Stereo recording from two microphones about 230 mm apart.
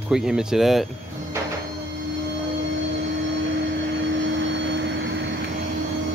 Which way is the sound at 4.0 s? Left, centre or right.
Right.